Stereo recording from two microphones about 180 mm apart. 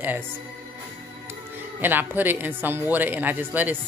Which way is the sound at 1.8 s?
10° right (ahead or behind).